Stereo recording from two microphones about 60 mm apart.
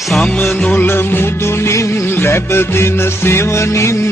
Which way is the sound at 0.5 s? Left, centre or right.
Left.